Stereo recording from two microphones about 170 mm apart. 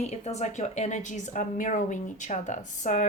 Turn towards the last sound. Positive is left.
turn(degrees=45)  # may be behind; listen again after turning